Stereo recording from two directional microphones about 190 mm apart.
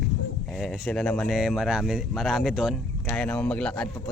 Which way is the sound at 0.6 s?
5° left (ahead or behind).